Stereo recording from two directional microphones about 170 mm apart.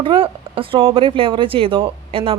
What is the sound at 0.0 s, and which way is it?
A woman's voice, 30° right (ahead or behind).